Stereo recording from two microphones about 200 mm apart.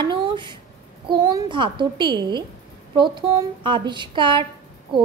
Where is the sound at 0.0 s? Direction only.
25° right (ahead or behind).